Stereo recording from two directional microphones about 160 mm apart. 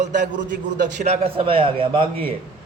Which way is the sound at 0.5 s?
90° right.